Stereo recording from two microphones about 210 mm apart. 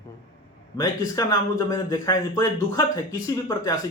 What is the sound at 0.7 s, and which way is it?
Speech, 15° left (ahead or behind).